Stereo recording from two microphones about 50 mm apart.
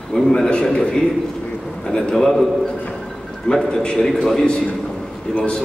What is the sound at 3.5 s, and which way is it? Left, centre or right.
A man's voice, centre.